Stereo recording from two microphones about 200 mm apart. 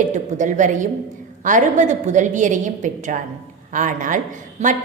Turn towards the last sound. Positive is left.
turn(degrees=-40)  # may be behind; listen again after turning